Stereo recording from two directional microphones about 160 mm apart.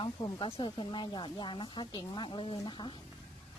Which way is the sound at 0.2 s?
30° left (ahead or behind).